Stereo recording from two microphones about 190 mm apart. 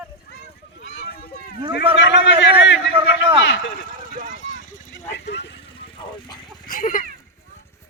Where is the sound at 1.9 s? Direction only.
75° left (ahead or behind).